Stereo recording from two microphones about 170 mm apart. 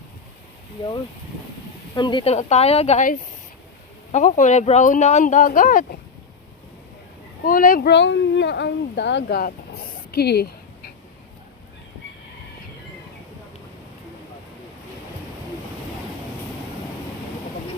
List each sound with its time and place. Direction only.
2.0 s speech: 25° left (ahead or behind)
2.3 s a woman's voice: 40° left (ahead or behind)
7.4 s speech: 55° left (ahead or behind)
7.9 s speech: 90° left; by 9.5 s 65° left (ahead or behind)
10.1 s a sound: 70° left (ahead or behind)